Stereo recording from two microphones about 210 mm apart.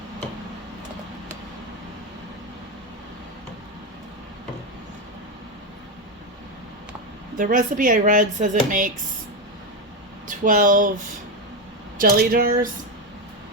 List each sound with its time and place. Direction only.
7.3 s speech: 40° right (ahead or behind)
10.2 s speech: 40° right (ahead or behind)
11.9 s speech: 45° right (ahead or behind)